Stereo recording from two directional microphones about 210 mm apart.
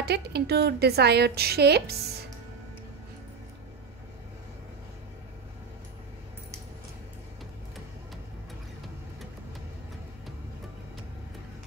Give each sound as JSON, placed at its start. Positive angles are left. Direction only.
{"t": 0.0, "sound": "a woman's voice", "side_deg": -50}